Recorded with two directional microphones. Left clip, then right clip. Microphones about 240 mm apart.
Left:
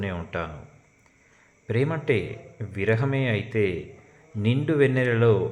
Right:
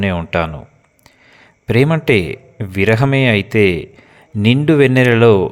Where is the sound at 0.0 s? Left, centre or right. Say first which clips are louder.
Right 13 dB; right.